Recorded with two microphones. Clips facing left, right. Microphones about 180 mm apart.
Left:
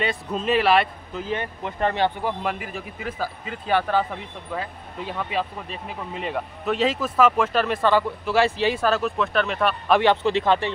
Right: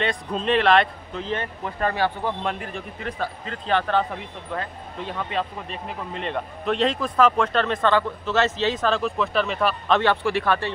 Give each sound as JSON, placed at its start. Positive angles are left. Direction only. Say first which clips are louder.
{"t": 0.0, "sound": "speech", "louder": "even", "side_deg": 5}
{"t": 2.2, "sound": "speech", "louder": "even", "side_deg": 5}
{"t": 9.9, "sound": "speech", "louder": "left 3 dB", "side_deg": 20}